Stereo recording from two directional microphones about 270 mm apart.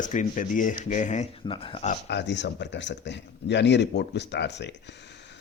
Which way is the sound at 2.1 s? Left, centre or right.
Left.